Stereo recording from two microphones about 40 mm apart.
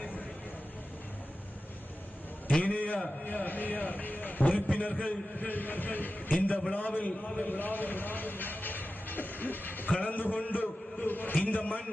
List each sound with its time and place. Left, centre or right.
2.6 s a man's voice: left
4.8 s a man's voice: left
5.5 s a man's voice: left